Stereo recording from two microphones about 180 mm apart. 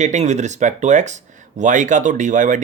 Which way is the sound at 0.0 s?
40° right (ahead or behind).